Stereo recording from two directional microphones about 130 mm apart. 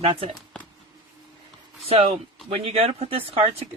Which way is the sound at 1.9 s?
50° right (ahead or behind).